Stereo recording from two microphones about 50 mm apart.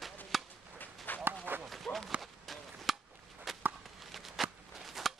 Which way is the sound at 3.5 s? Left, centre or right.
Centre.